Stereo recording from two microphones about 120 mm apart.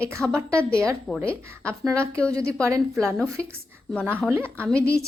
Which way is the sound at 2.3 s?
25° right (ahead or behind).